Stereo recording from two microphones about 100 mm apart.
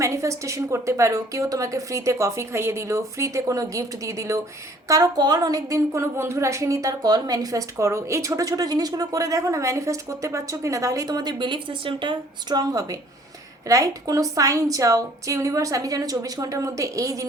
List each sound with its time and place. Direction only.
0.0 s a woman's voice: 30° right (ahead or behind)